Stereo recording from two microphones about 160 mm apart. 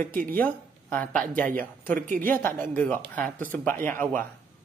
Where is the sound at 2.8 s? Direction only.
10° left (ahead or behind).